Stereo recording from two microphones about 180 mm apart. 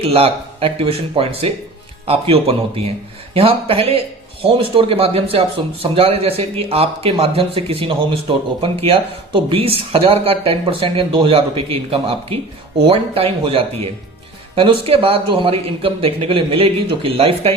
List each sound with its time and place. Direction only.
0.0 s speech: 30° right (ahead or behind)